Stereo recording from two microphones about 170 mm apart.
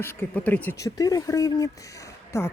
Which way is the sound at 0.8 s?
20° left (ahead or behind).